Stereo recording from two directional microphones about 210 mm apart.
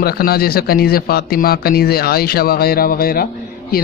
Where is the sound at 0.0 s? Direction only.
50° left (ahead or behind).